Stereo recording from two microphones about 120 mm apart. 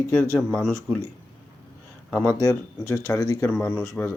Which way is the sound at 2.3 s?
25° left (ahead or behind).